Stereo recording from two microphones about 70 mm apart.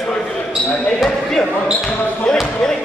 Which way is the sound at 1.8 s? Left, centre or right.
Centre.